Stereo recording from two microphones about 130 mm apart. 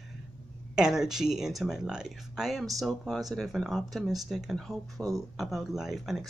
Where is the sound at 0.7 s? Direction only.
5° right (ahead or behind).